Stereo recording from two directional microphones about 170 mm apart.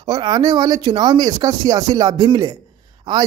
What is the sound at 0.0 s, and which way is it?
A man's voice, 25° right (ahead or behind).